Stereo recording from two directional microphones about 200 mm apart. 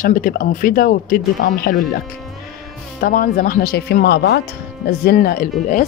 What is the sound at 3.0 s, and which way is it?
Speech, 45° left (ahead or behind).